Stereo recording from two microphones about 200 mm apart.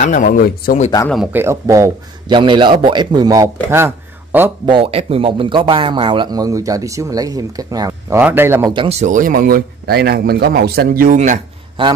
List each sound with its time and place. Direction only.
0.0 s speech: 40° left (ahead or behind)
1.0 s a man's voice: centre (ahead or behind)
4.6 s speech: 25° right (ahead or behind)
8.7 s speech: 35° right (ahead or behind)
11.8 s speech: 25° right (ahead or behind)